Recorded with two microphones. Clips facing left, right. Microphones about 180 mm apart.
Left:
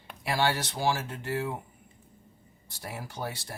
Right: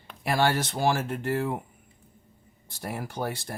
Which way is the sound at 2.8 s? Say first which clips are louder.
Right 5 dB; 55° right (ahead or behind).